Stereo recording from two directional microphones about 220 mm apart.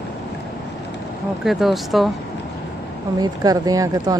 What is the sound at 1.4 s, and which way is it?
Speech, centre (ahead or behind).